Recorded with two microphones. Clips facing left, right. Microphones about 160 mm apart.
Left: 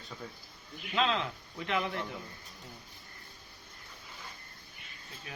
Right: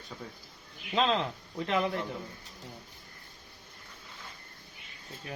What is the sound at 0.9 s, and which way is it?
A man's voice, 35° right (ahead or behind).